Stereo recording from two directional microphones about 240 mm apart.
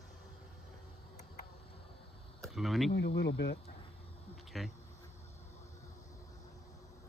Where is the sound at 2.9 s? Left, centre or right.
Left.